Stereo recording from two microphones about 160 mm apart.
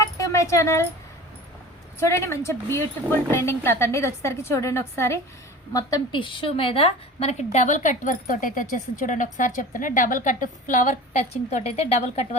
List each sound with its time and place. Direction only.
0.0 s a sound: 20° left (ahead or behind)
2.0 s a woman's voice: 15° left (ahead or behind)
5.7 s a woman's voice: 25° left (ahead or behind); by 10.9 s 55° left (ahead or behind)
11.5 s speech: 40° left (ahead or behind)